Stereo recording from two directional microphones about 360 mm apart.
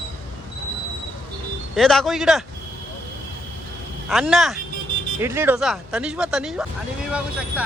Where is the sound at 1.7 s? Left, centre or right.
Centre.